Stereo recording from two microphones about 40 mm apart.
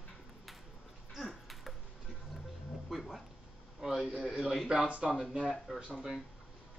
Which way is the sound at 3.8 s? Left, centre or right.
Centre.